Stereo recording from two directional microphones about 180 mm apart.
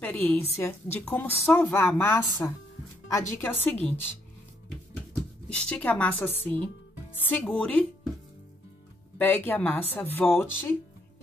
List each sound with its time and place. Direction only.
0.0 s a woman's voice: 10° left (ahead or behind)
5.5 s a woman's voice: 5° left (ahead or behind)
9.2 s a woman's voice: 10° left (ahead or behind)